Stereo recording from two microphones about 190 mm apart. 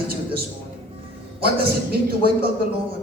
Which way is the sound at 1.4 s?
55° right (ahead or behind).